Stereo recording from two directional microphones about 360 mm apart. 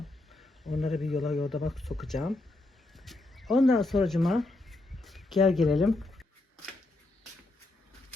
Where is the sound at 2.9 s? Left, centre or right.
Centre.